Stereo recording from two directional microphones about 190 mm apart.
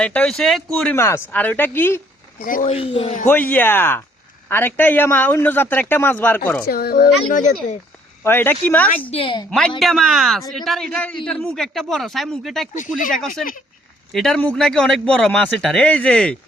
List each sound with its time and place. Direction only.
0.0 s speech: 5° left (ahead or behind)
0.9 s a man's voice: 15° left (ahead or behind)
2.4 s a woman's voice: 45° left (ahead or behind)
2.6 s a man's voice: 30° left (ahead or behind)
3.2 s a man's voice: 10° left (ahead or behind)
6.7 s a woman's voice: 50° left (ahead or behind)
8.2 s a man's voice: 10° left (ahead or behind)
9.1 s a woman's voice: 25° left (ahead or behind)
9.5 s speech: 5° left (ahead or behind)
14.1 s speech: centre (ahead or behind)